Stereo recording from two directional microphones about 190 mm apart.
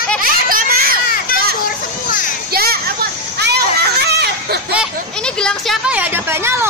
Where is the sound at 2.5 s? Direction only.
55° right (ahead or behind).